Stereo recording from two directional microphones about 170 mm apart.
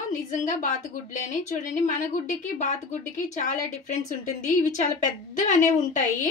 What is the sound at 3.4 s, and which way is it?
Speech, 45° left (ahead or behind).